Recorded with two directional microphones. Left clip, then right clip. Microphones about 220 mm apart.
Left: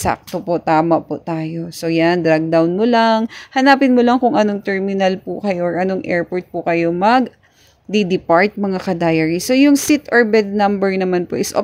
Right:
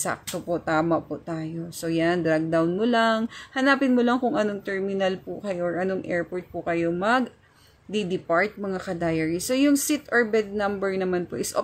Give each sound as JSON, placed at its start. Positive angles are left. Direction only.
{"t": 0.0, "sound": "speech", "side_deg": 30}